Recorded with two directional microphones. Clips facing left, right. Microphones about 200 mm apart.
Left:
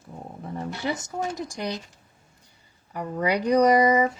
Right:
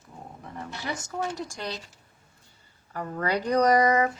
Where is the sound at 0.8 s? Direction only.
15° left (ahead or behind).